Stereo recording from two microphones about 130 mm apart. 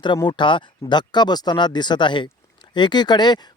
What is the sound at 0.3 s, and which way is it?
A man's voice, 40° left (ahead or behind).